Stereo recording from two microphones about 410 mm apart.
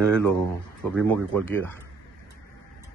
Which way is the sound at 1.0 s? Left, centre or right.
Centre.